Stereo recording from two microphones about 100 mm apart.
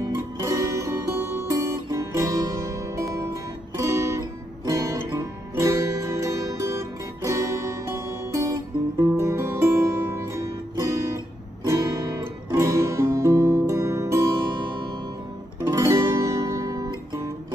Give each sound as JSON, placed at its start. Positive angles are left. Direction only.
{"t": 0.1, "sound": "music", "side_deg": -35}
{"t": 15.6, "sound": "guitar", "side_deg": -35}